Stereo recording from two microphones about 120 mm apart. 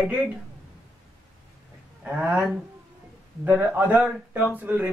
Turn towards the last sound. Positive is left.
turn(degrees=-15)  # may be behind; listen again after turning